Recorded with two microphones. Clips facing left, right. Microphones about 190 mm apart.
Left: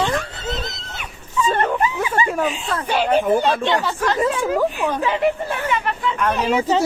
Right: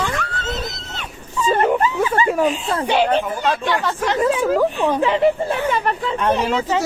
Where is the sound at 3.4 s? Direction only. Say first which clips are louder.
Left 1 dB; 25° left (ahead or behind).